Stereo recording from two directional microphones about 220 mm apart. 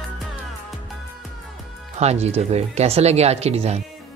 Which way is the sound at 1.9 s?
30° right (ahead or behind).